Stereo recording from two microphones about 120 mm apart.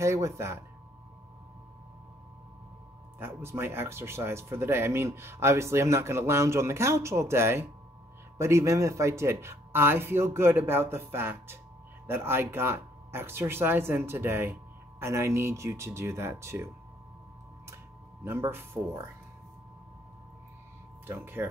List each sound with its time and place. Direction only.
0.0 s speech: 25° right (ahead or behind)
3.2 s speech: 20° right (ahead or behind)
18.2 s speech: 20° right (ahead or behind)
21.1 s speech: 20° right (ahead or behind)